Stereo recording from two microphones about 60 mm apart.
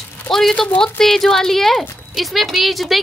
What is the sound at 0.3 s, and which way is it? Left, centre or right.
Speech, centre.